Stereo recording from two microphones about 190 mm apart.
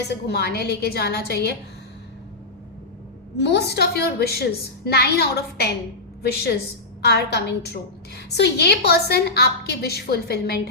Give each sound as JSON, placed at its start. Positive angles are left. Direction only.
{"t": 0.1, "sound": "a woman's voice", "side_deg": 60}
{"t": 3.3, "sound": "a woman's voice", "side_deg": 65}